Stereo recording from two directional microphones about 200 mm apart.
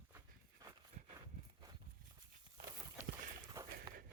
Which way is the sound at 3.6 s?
15° right (ahead or behind).